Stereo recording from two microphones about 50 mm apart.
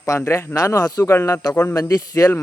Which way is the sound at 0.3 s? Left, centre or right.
Left.